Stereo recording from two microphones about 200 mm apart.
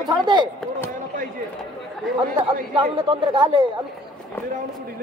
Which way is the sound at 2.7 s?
25° right (ahead or behind).